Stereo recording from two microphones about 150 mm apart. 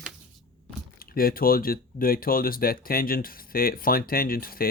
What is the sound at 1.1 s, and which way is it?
Speech, 75° left (ahead or behind).